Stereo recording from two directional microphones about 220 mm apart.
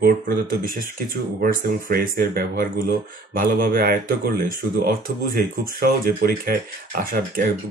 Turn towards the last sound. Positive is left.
turn(degrees=-40)  # may be behind; listen again after turning